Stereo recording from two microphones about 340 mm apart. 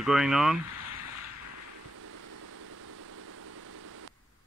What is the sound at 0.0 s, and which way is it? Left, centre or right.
Speech, centre.